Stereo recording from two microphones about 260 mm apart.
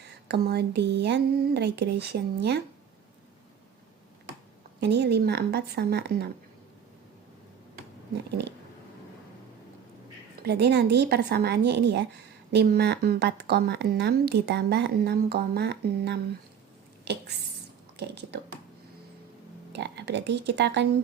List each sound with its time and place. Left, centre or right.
0.3 s speech: right
4.8 s speech: right
10.4 s speech: right
17.9 s speech: right
19.7 s speech: right